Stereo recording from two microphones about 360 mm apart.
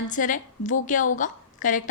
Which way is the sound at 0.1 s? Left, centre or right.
Left.